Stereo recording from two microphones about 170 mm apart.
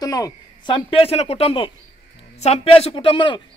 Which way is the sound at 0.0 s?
20° left (ahead or behind).